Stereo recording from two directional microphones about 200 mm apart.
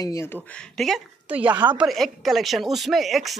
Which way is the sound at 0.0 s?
15° left (ahead or behind).